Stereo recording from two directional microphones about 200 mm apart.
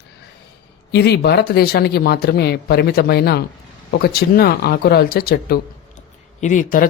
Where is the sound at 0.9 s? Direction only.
55° left (ahead or behind).